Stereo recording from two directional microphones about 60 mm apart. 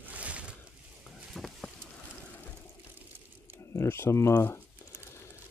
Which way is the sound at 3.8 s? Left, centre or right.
Left.